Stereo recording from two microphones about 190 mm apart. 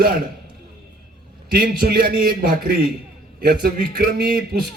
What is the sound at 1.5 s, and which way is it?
A man's voice, 50° right (ahead or behind).